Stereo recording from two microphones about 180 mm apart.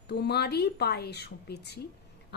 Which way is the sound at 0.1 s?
65° left (ahead or behind).